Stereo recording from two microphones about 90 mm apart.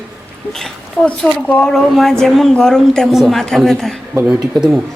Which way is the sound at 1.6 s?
5° left (ahead or behind).